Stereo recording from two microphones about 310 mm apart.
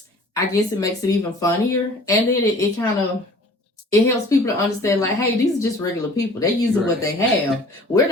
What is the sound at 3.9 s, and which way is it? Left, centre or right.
Speech, centre.